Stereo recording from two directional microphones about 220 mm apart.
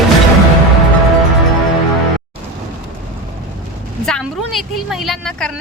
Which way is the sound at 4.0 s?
Centre (ahead or behind).